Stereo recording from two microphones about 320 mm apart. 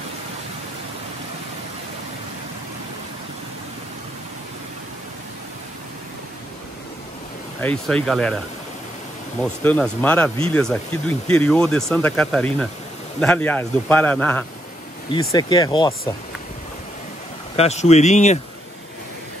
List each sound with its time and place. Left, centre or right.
7.6 s speech: centre
9.4 s speech: centre
17.6 s speech: left